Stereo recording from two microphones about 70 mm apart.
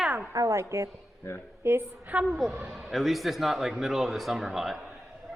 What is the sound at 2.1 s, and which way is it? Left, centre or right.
Speech, right.